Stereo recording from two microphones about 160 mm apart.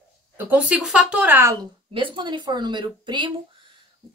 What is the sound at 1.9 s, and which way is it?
A woman's voice, 30° right (ahead or behind).